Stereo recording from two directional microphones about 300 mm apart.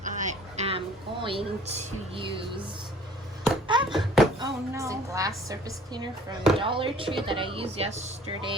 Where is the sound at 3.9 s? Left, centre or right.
Centre.